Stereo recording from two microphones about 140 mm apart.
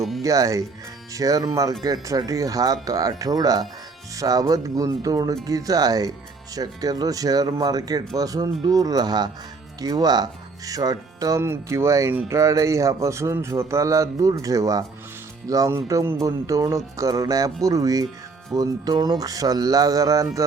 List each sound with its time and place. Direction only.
0.2 s speech: 25° right (ahead or behind)